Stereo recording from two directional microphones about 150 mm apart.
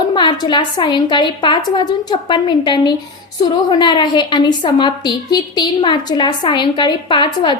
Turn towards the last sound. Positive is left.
turn(degrees=30)  # may be behind; listen again after turning